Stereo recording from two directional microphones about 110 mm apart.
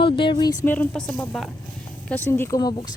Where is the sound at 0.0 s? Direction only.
45° left (ahead or behind).